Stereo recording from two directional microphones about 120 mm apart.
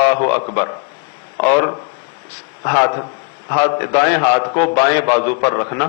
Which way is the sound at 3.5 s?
25° left (ahead or behind).